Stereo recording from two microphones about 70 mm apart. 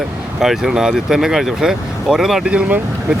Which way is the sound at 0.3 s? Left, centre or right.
Centre.